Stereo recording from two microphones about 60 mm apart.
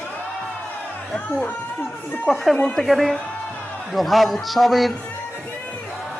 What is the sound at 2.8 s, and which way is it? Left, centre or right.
A woman's voice, centre.